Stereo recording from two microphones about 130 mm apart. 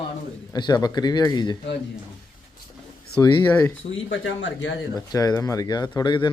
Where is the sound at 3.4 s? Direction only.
15° left (ahead or behind).